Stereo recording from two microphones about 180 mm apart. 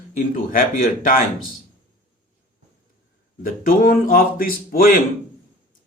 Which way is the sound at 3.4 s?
50° left (ahead or behind).